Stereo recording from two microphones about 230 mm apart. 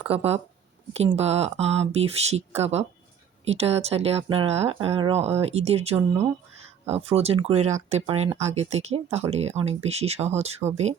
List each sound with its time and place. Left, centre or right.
0.1 s speech: right